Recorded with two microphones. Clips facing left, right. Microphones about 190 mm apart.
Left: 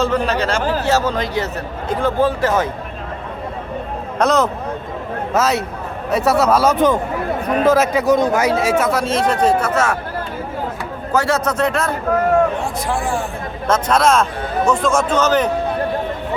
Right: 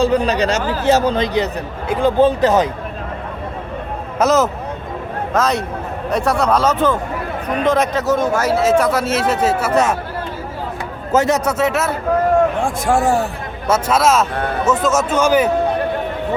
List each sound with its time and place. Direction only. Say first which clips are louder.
0.0 s a man's voice: right 3 dB; 15° right (ahead or behind)
4.2 s speech: right 1 dB; 5° right (ahead or behind); by 8.8 s 15° left (ahead or behind)
8.8 s speech: even; centre (ahead or behind)
11.1 s speech: right 2 dB; 20° right (ahead or behind)
11.5 s speech: right 1 dB; 5° right (ahead or behind)
12.5 s speech: right 5 dB; 50° right (ahead or behind)
13.7 s speech: even; 5° right (ahead or behind)